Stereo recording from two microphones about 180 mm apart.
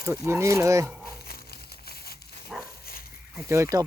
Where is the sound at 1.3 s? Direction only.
60° left (ahead or behind).